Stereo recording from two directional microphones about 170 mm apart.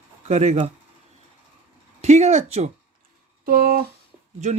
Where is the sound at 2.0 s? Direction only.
40° right (ahead or behind).